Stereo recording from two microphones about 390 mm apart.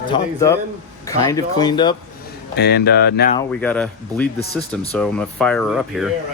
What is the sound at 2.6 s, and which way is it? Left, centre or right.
Speech, left.